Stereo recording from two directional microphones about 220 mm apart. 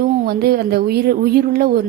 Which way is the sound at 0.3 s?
45° right (ahead or behind).